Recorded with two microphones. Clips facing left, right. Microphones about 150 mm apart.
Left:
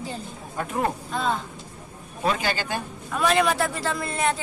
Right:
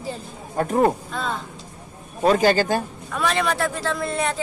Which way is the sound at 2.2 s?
40° right (ahead or behind).